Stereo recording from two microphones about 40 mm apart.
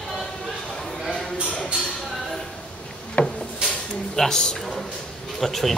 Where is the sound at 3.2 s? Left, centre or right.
Left.